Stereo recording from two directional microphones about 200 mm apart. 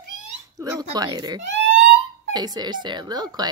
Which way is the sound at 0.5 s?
20° right (ahead or behind).